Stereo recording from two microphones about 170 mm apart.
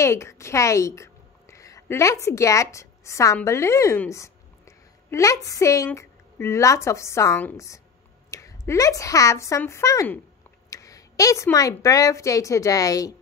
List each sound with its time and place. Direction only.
0.0 s a woman's voice: 15° left (ahead or behind)